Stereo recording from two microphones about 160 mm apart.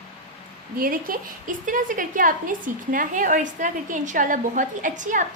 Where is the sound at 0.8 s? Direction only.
65° right (ahead or behind).